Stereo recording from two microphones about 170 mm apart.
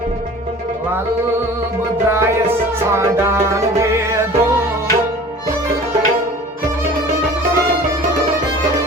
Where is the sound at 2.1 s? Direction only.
15° right (ahead or behind).